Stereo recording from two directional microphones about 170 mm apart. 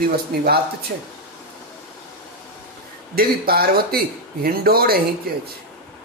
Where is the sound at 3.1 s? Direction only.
65° right (ahead or behind).